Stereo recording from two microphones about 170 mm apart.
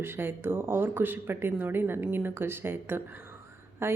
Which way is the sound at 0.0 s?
15° right (ahead or behind).